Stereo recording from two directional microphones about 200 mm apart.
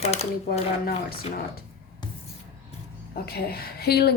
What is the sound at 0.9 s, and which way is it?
Speech, 50° left (ahead or behind).